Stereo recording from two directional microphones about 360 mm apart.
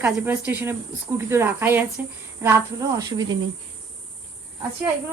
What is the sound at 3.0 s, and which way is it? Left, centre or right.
Speech, centre.